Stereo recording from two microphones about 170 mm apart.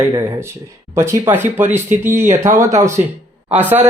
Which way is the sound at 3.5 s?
10° right (ahead or behind).